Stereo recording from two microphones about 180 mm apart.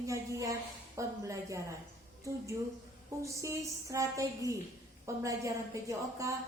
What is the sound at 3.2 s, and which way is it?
A woman's voice, 15° right (ahead or behind).